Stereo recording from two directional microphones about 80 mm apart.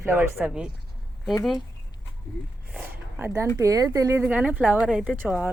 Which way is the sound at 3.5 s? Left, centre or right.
Right.